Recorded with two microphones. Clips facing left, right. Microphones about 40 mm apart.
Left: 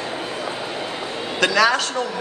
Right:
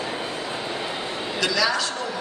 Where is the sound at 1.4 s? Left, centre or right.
Left.